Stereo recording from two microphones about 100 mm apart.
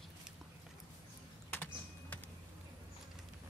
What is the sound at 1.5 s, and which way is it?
Typing, 15° left (ahead or behind).